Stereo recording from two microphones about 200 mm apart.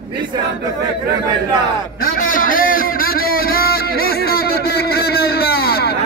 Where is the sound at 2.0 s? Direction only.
45° left (ahead or behind).